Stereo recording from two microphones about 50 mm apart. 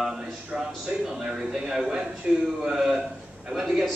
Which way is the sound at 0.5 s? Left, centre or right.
Centre.